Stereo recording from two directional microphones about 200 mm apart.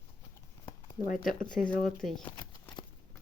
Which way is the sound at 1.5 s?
5° left (ahead or behind).